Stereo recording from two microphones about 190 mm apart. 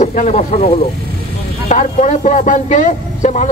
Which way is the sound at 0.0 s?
40° left (ahead or behind).